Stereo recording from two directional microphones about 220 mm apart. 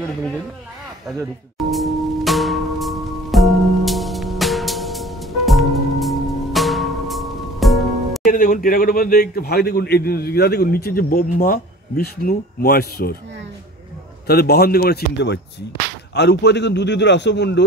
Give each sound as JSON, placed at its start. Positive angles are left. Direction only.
{"t": 1.7, "sound": "music", "side_deg": 0}
{"t": 8.3, "sound": "a man's voice", "side_deg": 40}
{"t": 14.2, "sound": "a man's voice", "side_deg": 45}